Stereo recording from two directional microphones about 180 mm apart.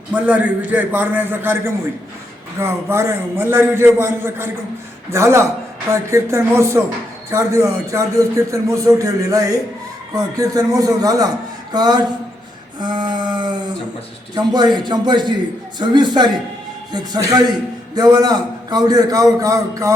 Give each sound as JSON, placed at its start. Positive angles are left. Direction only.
{"t": 0.1, "sound": "a man's voice", "side_deg": -5}
{"t": 12.8, "sound": "a sound", "side_deg": -25}
{"t": 14.3, "sound": "a man's voice", "side_deg": -25}
{"t": 17.9, "sound": "a man's voice", "side_deg": -20}